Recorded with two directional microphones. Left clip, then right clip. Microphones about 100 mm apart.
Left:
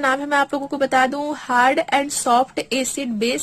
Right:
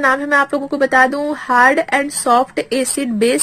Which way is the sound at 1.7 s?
65° left (ahead or behind).